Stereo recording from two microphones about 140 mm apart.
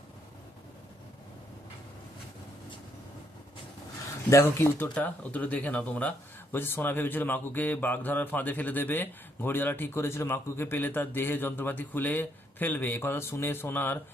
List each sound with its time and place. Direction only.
4.3 s speech: 20° left (ahead or behind)